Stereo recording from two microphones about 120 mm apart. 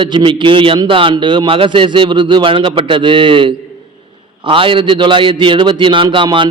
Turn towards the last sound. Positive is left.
turn(degrees=-45)  # may be behind; listen again after turning